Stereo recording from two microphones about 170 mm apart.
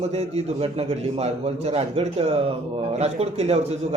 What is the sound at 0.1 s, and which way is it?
Speech, 40° right (ahead or behind).